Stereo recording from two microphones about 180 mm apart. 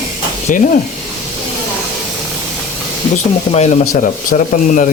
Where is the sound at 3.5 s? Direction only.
40° left (ahead or behind).